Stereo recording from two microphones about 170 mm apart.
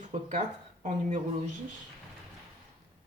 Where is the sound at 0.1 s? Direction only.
45° right (ahead or behind).